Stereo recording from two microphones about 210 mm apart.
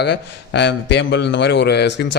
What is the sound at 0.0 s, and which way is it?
A man's voice, 55° left (ahead or behind).